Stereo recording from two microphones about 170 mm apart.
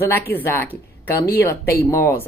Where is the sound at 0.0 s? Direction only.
15° left (ahead or behind).